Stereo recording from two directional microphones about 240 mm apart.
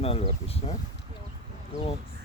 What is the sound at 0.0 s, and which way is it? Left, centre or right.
Speech, left.